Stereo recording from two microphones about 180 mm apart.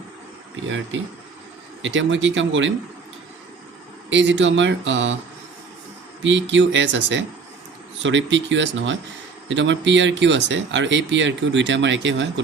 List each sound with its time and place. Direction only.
0.5 s speech: 90° right
4.1 s speech: 80° right
6.2 s speech: 90° right